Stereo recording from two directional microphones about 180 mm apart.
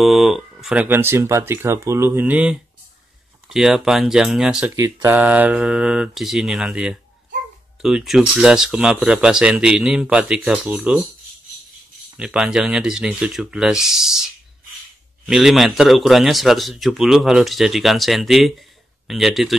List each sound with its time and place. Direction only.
0.0 s a man's voice: centre (ahead or behind)
4.7 s speech: 20° right (ahead or behind)
5.1 s a man's voice: 10° right (ahead or behind)
12.2 s a man's voice: 5° right (ahead or behind)
15.2 s a man's voice: centre (ahead or behind)